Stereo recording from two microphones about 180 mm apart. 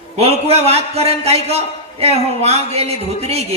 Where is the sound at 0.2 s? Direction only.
35° right (ahead or behind).